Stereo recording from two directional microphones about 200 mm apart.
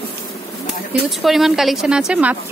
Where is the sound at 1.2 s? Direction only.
Centre (ahead or behind).